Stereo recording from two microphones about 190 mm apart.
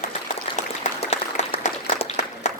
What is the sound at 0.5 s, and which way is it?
Applause, 25° left (ahead or behind).